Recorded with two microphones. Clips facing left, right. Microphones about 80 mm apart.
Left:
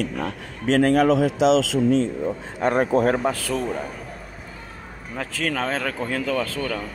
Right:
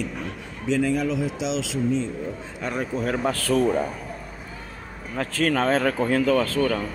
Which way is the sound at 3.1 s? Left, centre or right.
Centre.